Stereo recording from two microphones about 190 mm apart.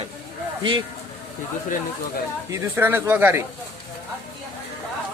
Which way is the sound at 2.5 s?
15° right (ahead or behind).